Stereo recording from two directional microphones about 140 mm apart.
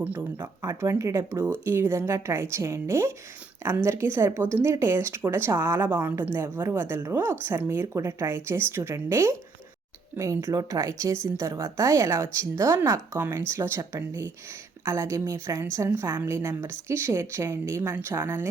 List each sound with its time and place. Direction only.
0.0 s a woman's voice: 15° right (ahead or behind)